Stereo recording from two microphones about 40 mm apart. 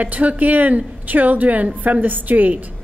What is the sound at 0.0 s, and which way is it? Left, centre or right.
A woman's voice, right.